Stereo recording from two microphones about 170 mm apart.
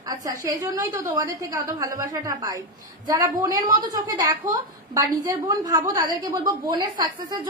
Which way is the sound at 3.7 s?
20° right (ahead or behind).